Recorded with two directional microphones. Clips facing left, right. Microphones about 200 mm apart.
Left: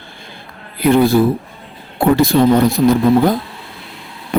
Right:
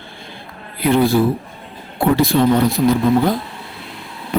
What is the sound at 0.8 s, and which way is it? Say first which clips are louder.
A man's voice: left 3 dB; 45° left (ahead or behind).